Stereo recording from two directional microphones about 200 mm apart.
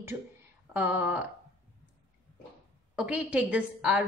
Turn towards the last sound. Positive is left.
turn(degrees=-5)  # may be behind; listen again after turning